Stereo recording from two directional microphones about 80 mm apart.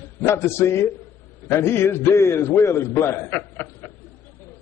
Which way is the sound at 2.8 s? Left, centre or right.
Left.